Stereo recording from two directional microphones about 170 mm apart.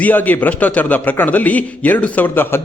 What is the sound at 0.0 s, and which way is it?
A man's voice, 10° left (ahead or behind).